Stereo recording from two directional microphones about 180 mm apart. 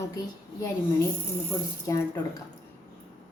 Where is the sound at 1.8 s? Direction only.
15° left (ahead or behind).